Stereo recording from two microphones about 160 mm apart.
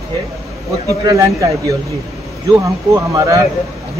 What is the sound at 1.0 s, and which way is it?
Speech, 20° right (ahead or behind).